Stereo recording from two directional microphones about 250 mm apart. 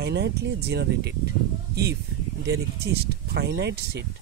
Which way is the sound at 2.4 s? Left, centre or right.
Right.